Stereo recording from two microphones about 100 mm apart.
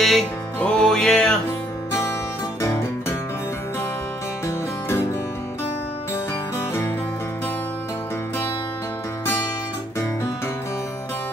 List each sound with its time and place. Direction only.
0.0 s music: centre (ahead or behind)
2.6 s music: 20° left (ahead or behind)